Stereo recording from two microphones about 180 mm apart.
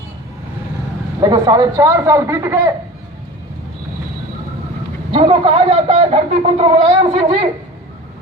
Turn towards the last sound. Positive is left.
turn(degrees=-30)  # may be behind; listen again after turning